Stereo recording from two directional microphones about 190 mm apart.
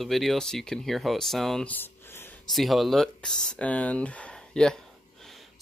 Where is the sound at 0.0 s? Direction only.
Centre (ahead or behind).